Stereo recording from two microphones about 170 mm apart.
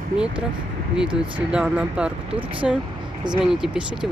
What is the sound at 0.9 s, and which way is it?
Speech, 5° right (ahead or behind).